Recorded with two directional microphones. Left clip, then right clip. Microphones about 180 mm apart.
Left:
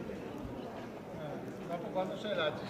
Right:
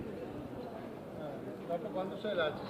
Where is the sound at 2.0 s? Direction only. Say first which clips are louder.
Left 2 dB; 45° left (ahead or behind).